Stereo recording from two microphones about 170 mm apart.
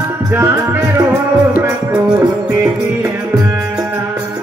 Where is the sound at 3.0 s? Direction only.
15° right (ahead or behind).